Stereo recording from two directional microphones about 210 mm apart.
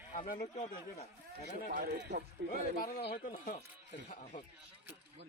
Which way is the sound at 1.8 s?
55° right (ahead or behind).